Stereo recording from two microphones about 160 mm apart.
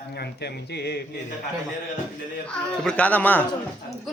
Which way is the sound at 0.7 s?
90° left.